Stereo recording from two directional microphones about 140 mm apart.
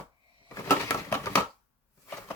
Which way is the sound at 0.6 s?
20° left (ahead or behind).